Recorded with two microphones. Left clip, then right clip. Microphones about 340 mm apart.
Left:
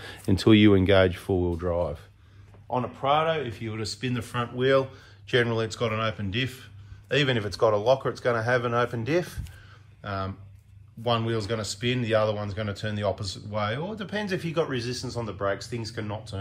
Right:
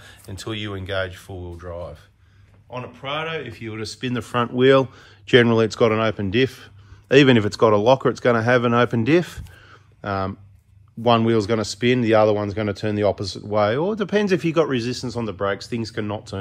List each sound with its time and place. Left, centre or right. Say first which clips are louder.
0.0 s speech: left 10 dB; left
2.7 s speech: left 4 dB; centre